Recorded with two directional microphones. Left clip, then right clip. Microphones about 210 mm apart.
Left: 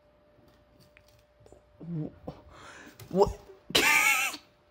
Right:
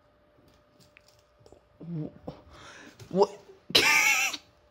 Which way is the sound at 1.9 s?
Centre (ahead or behind).